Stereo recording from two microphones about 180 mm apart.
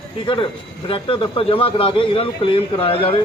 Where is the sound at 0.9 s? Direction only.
30° left (ahead or behind).